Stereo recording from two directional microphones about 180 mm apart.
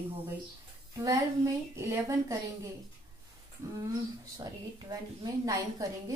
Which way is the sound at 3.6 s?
15° right (ahead or behind).